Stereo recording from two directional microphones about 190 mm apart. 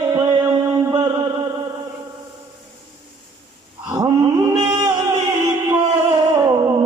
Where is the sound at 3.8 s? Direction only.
20° right (ahead or behind).